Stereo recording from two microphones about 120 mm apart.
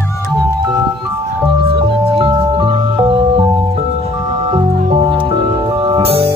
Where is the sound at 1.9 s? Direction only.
45° right (ahead or behind).